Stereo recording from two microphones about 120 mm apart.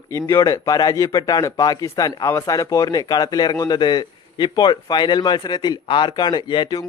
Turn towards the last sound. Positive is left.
turn(degrees=40)  # may be behind; listen again after turning